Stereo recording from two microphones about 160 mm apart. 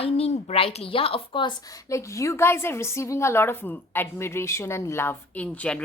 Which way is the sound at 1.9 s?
20° left (ahead or behind).